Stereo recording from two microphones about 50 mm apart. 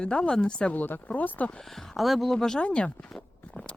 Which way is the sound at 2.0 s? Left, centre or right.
Centre.